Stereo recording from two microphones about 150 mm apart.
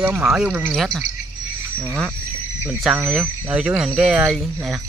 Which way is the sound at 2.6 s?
10° right (ahead or behind).